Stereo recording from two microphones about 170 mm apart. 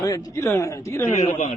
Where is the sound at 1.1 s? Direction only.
40° left (ahead or behind).